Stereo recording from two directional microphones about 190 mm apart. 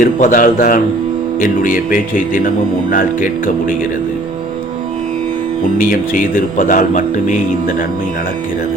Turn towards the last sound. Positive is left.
turn(degrees=45)  # may be behind; listen again after turning